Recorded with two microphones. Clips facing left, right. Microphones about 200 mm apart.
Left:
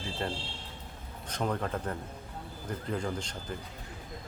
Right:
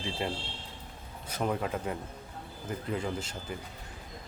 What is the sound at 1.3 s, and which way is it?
Speech, 5° right (ahead or behind).